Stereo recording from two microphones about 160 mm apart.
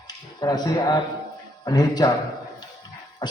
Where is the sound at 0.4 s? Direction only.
25° left (ahead or behind).